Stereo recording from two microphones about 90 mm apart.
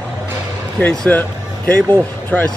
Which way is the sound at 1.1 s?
20° left (ahead or behind).